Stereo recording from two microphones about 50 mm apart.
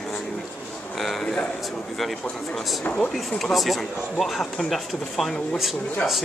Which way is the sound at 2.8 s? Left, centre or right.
Left.